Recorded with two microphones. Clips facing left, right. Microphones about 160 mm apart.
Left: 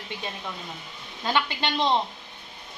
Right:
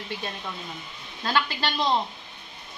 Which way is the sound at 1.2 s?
20° left (ahead or behind).